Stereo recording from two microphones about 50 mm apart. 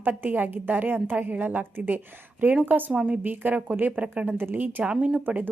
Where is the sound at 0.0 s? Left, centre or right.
Right.